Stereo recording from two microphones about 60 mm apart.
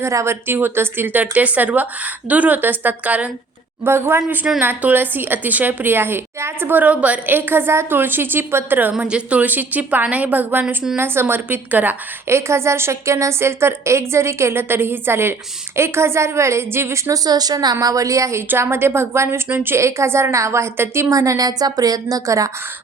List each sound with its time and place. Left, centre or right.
0.0 s speech: right
0.4 s speech: right
3.8 s a woman's voice: right
4.4 s a woman's voice: right
8.8 s speech: centre
9.5 s a woman's voice: right
12.3 s a woman's voice: right
17.1 s a woman's voice: right
18.6 s a woman's voice: right
19.5 s a woman's voice: right
19.8 s a woman's voice: right
21.1 s a woman's voice: right